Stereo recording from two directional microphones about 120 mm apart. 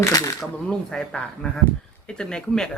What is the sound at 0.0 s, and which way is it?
Speech, 30° left (ahead or behind).